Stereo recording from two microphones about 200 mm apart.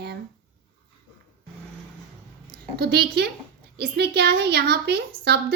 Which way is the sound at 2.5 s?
50° right (ahead or behind).